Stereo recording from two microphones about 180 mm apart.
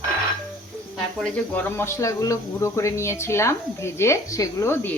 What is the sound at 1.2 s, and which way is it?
Speech, 5° left (ahead or behind).